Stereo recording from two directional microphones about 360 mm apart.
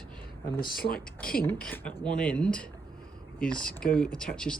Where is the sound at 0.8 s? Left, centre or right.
Left.